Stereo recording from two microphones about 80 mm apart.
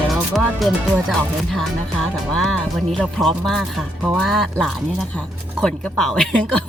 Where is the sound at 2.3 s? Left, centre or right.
Centre.